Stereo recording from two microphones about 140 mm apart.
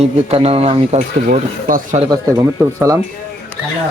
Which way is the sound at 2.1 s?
25° right (ahead or behind).